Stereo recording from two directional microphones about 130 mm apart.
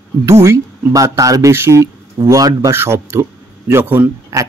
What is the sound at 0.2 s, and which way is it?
Speech, 20° right (ahead or behind).